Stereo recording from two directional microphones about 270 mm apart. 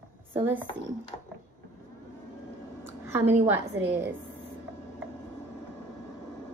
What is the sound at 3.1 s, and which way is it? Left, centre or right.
Speech, centre.